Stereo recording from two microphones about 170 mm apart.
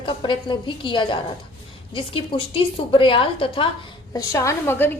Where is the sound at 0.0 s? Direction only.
30° left (ahead or behind).